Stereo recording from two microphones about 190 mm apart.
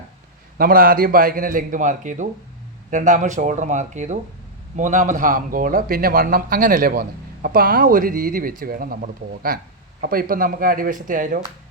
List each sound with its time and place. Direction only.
0.6 s speech: 50° right (ahead or behind)